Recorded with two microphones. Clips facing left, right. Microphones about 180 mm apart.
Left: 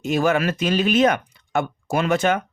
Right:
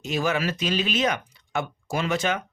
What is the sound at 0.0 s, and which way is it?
Speech, 50° left (ahead or behind).